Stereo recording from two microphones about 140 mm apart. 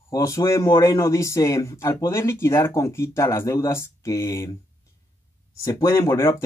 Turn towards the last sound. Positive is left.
turn(degrees=20)  # may be behind; listen again after turning